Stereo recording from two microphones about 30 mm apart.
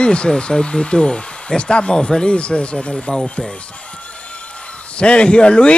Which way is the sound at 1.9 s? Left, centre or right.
Centre.